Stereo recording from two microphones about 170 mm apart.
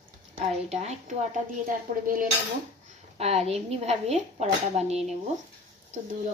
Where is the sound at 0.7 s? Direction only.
40° right (ahead or behind).